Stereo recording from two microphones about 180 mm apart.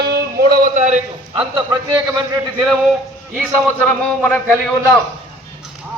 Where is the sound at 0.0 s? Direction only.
60° right (ahead or behind).